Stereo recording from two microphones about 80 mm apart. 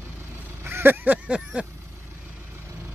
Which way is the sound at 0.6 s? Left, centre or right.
Right.